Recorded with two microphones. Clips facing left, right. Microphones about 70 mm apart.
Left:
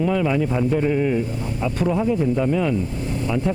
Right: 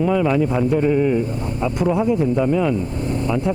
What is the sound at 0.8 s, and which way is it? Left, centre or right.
Speech, centre.